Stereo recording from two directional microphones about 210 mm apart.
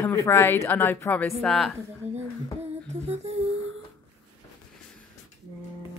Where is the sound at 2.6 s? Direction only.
30° right (ahead or behind).